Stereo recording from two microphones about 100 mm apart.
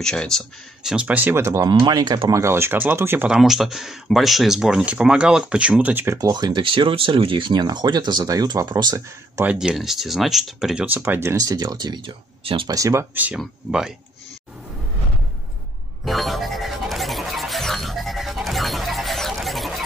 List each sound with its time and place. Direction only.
0.0 s speech: 5° left (ahead or behind)
0.8 s speech: 10° right (ahead or behind); by 2.1 s 45° right (ahead or behind)
2.3 s speech: 25° right (ahead or behind)
3.3 s speech: 5° right (ahead or behind)
6.1 s speech: 45° right (ahead or behind)
9.6 s speech: 5° right (ahead or behind)
10.9 s speech: 20° right (ahead or behind)
11.7 s speech: 50° right (ahead or behind)
12.6 s speech: 35° right (ahead or behind)
13.1 s speech: 15° right (ahead or behind)
16.1 s music: centre (ahead or behind)